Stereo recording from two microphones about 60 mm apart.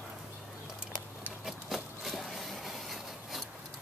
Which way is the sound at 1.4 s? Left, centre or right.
Centre.